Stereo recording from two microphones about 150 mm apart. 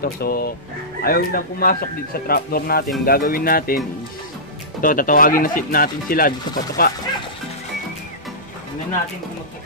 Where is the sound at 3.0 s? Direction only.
75° left (ahead or behind).